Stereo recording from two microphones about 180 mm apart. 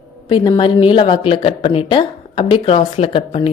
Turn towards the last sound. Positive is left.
turn(degrees=30)  # may be behind; listen again after turning